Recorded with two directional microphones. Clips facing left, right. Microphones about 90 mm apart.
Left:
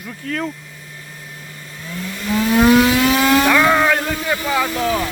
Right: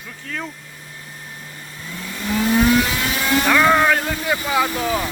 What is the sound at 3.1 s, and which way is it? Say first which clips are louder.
Vehicle: left 6 dB; 90° left.